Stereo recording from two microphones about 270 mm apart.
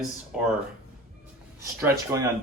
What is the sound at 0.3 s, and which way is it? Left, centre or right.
Speech, centre.